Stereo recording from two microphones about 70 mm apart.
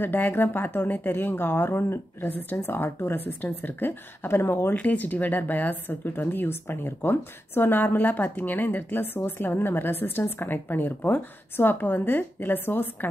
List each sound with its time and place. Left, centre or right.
0.0 s speech: left
4.7 s speech: left